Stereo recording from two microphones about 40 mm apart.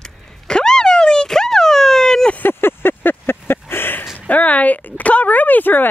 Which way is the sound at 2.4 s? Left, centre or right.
Left.